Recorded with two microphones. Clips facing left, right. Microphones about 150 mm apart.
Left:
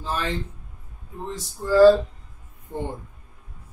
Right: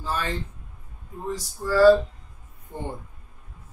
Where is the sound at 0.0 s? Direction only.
20° left (ahead or behind).